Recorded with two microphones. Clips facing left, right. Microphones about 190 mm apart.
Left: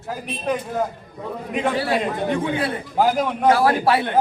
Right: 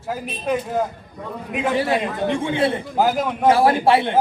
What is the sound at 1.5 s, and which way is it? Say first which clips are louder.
Speech: even; 5° right (ahead or behind).